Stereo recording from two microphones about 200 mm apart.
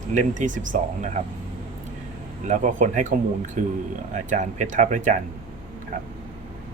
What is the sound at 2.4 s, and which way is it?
Speech, 35° right (ahead or behind).